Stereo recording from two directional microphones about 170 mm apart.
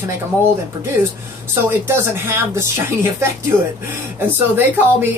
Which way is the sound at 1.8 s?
15° right (ahead or behind).